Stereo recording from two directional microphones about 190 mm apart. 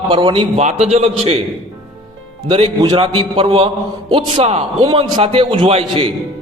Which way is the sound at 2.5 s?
30° right (ahead or behind).